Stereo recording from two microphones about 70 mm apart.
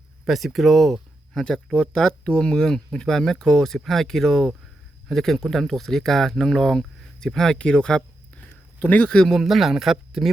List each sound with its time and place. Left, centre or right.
0.3 s speech: centre
1.7 s speech: centre
8.4 s a sound: left
9.3 s speech: centre